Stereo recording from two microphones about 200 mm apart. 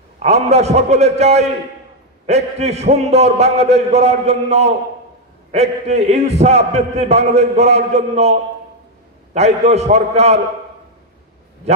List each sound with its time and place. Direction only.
0.2 s a man's voice: 35° right (ahead or behind)